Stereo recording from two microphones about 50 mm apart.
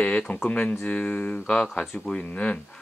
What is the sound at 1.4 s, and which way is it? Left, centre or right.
Speech, centre.